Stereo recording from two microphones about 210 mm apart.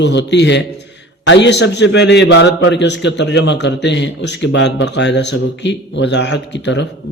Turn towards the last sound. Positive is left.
turn(degrees=55)  # may be behind; listen again after turning